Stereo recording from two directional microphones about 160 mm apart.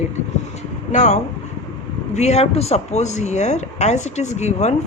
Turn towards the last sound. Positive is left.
turn(degrees=45)  # may be behind; listen again after turning